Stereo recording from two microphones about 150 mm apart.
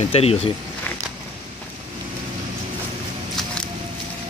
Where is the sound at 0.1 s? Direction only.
40° left (ahead or behind).